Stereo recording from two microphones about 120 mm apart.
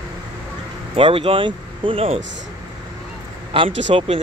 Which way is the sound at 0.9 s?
50° right (ahead or behind).